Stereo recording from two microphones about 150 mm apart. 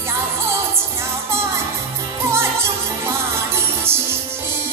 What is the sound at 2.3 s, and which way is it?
Music, 20° right (ahead or behind).